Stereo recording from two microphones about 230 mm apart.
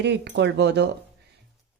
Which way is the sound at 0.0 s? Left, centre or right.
Right.